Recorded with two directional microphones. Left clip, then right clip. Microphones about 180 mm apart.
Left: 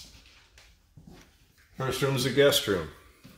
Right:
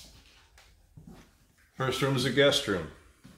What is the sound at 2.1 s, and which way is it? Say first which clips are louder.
Speech: left 2 dB; 50° left (ahead or behind).